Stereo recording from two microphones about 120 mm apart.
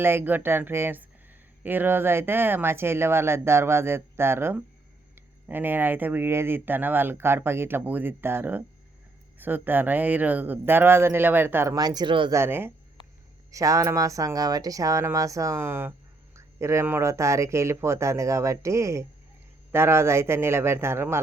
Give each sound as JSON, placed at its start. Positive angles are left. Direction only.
{"t": 0.0, "sound": "speech", "side_deg": -20}
{"t": 11.7, "sound": "speech", "side_deg": -35}
{"t": 12.3, "sound": "speech", "side_deg": -20}